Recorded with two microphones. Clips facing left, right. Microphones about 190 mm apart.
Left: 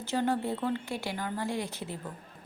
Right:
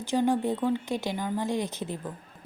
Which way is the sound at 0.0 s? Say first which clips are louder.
Right 4 dB; 15° right (ahead or behind).